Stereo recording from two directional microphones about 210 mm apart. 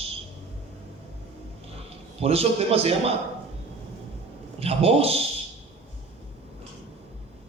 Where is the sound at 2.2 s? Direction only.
30° right (ahead or behind).